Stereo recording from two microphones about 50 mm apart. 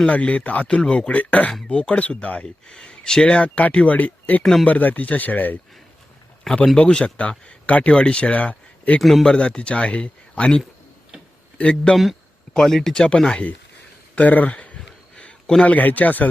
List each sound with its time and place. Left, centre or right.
0.1 s speech: left
0.7 s speech: centre
2.6 s speech: centre; by 5.5 s left
6.7 s speech: left
9.0 s speech: centre
9.2 s speech: centre
14.2 s speech: left
15.1 s a sound: left
15.6 s speech: left